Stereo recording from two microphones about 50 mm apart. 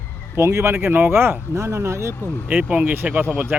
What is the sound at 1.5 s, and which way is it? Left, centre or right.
Speech, right.